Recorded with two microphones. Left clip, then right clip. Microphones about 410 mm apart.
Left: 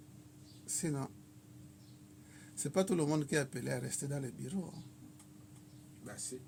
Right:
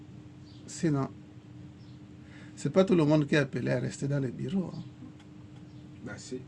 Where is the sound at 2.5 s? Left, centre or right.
Left.